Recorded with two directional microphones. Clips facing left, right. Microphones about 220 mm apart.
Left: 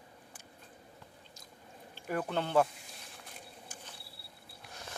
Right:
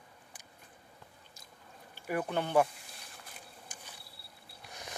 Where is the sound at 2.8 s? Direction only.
Centre (ahead or behind).